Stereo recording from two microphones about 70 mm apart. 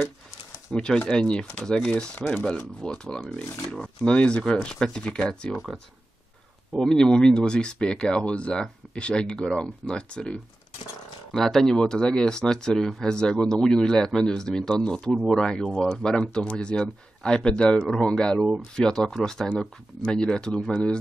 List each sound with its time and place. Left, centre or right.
0.7 s speech: centre
3.4 s speech: left
4.0 s speech: centre
6.7 s speech: centre